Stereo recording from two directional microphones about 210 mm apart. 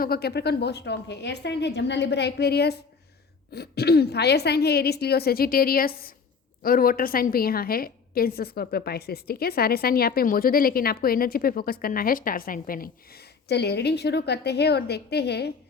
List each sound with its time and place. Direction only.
0.0 s a woman's voice: 50° left (ahead or behind)